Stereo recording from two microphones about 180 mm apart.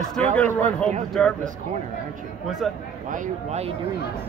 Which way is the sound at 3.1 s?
40° right (ahead or behind).